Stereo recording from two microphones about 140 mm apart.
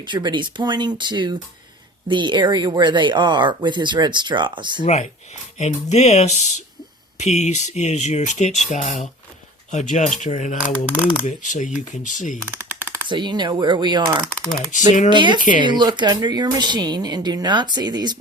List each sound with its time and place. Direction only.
0.0 s speech: 35° right (ahead or behind)
4.8 s speech: 55° left (ahead or behind)
10.6 s speech: 10° right (ahead or behind)
11.3 s speech: 60° left (ahead or behind)
13.1 s speech: 35° right (ahead or behind)
15.4 s speech: 70° left (ahead or behind)
15.6 s speech: 30° right (ahead or behind)